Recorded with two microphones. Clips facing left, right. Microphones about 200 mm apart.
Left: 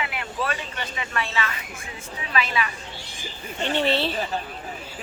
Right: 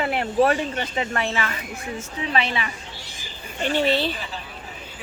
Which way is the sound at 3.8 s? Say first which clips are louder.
Right 2 dB; centre (ahead or behind).